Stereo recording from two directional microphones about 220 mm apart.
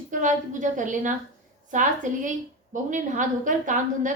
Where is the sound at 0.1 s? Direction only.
35° right (ahead or behind).